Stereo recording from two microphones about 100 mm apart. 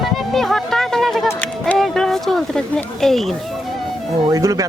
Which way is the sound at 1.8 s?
5° left (ahead or behind).